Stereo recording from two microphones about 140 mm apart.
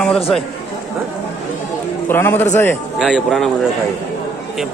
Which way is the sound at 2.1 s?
15° left (ahead or behind).